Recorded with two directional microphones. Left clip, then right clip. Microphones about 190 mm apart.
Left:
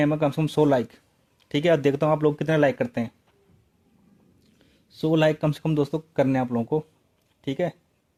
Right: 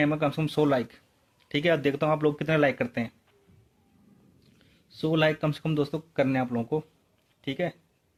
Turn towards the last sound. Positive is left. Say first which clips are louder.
# left 4 dB
turn(degrees=40)  # may be behind; listen again after turning